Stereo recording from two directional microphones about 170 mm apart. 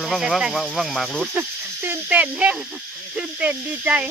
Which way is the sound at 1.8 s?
10° right (ahead or behind).